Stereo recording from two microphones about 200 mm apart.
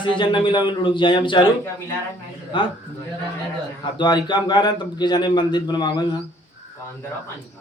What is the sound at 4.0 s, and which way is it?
A man's voice, 20° left (ahead or behind).